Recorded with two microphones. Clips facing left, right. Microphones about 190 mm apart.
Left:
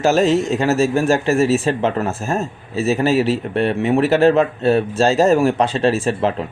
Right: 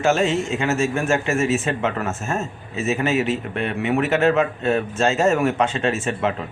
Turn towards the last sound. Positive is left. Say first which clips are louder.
# left 5 dB
turn(degrees=35)  # may be behind; listen again after turning